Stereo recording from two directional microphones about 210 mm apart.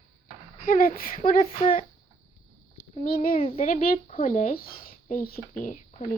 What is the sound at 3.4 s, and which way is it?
Speech, 30° left (ahead or behind).